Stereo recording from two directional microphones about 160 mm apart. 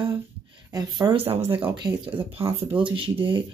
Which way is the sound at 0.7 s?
25° right (ahead or behind).